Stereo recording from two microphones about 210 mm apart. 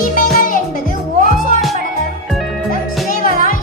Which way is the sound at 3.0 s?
40° left (ahead or behind).